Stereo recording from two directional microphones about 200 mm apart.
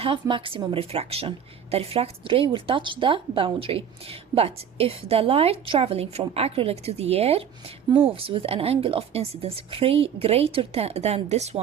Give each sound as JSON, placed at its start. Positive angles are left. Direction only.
{"t": 0.0, "sound": "a woman's voice", "side_deg": -25}